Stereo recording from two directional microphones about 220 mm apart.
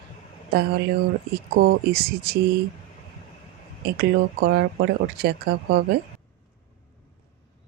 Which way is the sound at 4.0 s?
45° right (ahead or behind).